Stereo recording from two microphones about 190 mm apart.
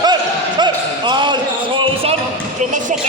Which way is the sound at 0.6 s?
25° right (ahead or behind).